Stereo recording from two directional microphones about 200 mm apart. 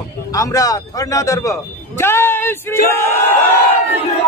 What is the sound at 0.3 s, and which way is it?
A man's voice, 15° left (ahead or behind).